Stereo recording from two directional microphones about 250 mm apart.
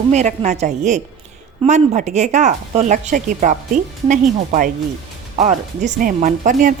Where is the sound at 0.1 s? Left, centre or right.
Right.